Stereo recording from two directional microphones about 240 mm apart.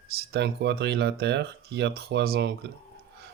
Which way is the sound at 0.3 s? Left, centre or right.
Right.